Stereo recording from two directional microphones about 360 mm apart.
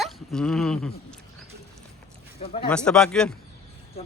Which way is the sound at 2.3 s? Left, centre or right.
Centre.